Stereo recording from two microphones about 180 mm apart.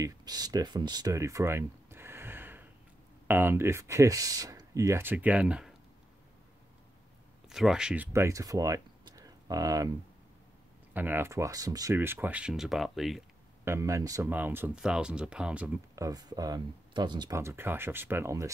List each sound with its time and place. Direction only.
0.0 s a sound: 20° right (ahead or behind)
3.3 s speech: 10° right (ahead or behind)
7.4 s speech: centre (ahead or behind); by 9.8 s 20° right (ahead or behind)
10.9 s speech: 10° right (ahead or behind)
13.7 s speech: 15° right (ahead or behind)
16.0 s speech: 20° right (ahead or behind)